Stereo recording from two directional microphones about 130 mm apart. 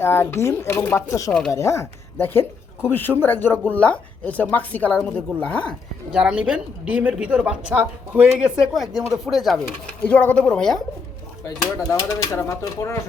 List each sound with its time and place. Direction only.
0.0 s speech: 15° left (ahead or behind)
1.3 s speech: 5° left (ahead or behind)
1.5 s speech: 20° left (ahead or behind)
6.1 s a woman's voice: 5° right (ahead or behind)
10.0 s speech: 10° left (ahead or behind)
11.4 s speech: 30° left (ahead or behind)